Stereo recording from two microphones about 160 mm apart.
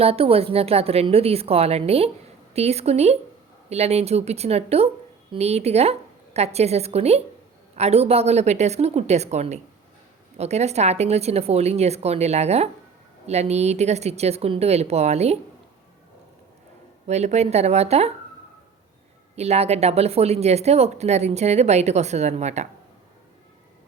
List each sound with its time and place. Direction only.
0.0 s speech: 40° right (ahead or behind)
17.1 s speech: 45° right (ahead or behind)
19.4 s speech: 40° right (ahead or behind)